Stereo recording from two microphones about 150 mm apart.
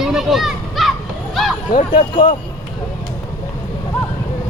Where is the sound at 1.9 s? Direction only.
35° left (ahead or behind).